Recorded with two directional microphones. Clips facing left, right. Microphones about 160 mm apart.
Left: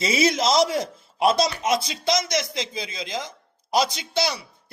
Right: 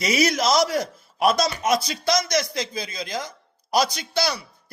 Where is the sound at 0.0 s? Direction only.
25° left (ahead or behind).